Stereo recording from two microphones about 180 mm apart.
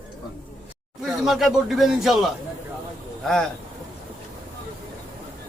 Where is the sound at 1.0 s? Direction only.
Centre (ahead or behind).